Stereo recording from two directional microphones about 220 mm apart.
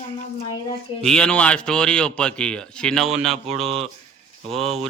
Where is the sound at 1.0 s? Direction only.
5° left (ahead or behind).